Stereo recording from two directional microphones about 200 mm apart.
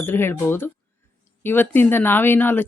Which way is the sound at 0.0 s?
10° left (ahead or behind).